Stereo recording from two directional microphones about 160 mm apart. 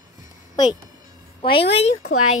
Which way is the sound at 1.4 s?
35° left (ahead or behind).